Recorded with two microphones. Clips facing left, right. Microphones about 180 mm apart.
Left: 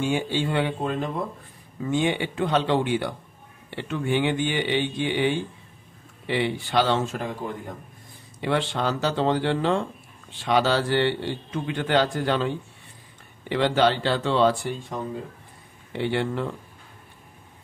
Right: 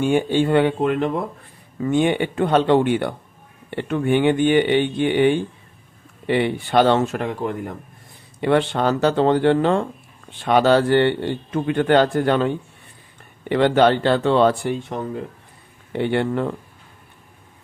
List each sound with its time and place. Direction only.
0.0 s a man's voice: 55° right (ahead or behind); by 1.1 s 70° right (ahead or behind)
1.8 s a man's voice: 55° right (ahead or behind)
8.4 s a man's voice: 55° right (ahead or behind)